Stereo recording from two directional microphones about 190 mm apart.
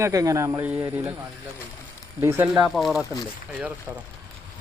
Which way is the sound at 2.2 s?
10° right (ahead or behind).